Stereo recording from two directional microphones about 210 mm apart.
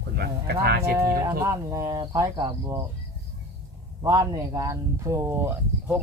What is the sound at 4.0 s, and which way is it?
Speech, 15° right (ahead or behind).